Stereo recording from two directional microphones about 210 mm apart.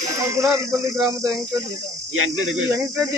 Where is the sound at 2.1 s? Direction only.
70° right (ahead or behind).